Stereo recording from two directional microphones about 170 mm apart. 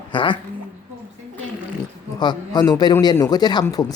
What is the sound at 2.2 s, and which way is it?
A woman's voice, 25° left (ahead or behind).